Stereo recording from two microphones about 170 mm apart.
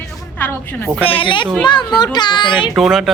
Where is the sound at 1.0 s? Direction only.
30° left (ahead or behind).